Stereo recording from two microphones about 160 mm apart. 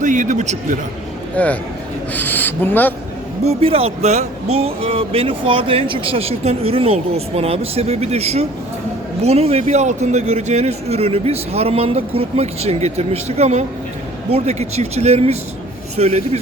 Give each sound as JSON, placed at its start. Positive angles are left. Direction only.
{"t": 0.0, "sound": "a man's voice", "side_deg": -50}
{"t": 1.4, "sound": "speech", "side_deg": 10}
{"t": 3.4, "sound": "a man's voice", "side_deg": -40}